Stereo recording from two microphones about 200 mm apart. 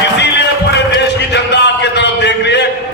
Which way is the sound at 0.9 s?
60° left (ahead or behind).